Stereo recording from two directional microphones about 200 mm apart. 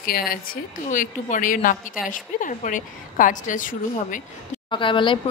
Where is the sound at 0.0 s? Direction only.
45° left (ahead or behind).